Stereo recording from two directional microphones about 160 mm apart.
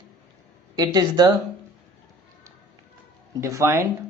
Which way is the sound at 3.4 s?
20° right (ahead or behind).